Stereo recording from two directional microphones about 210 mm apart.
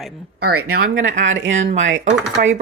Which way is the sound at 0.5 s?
70° right (ahead or behind).